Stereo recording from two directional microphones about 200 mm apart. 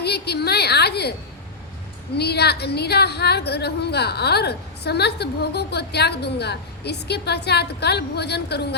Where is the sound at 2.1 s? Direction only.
55° left (ahead or behind).